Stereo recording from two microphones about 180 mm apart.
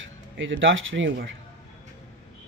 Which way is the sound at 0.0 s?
90° right.